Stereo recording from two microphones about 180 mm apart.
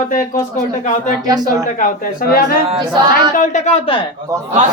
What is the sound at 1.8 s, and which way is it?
Speech, 50° left (ahead or behind).